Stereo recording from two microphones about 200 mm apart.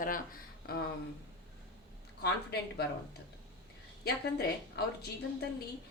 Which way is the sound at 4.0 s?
55° left (ahead or behind).